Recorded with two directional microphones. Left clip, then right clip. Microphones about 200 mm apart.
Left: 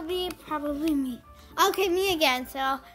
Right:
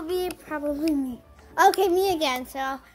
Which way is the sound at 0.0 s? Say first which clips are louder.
Right 3 dB; 15° right (ahead or behind).